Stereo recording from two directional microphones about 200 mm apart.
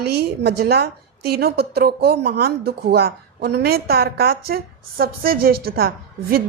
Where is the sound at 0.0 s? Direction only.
55° right (ahead or behind).